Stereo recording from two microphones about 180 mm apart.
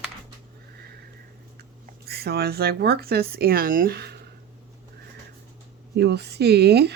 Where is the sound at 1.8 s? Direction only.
60° right (ahead or behind).